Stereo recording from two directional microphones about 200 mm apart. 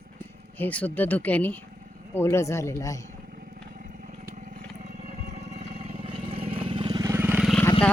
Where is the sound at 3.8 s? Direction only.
40° right (ahead or behind); by 7.6 s centre (ahead or behind).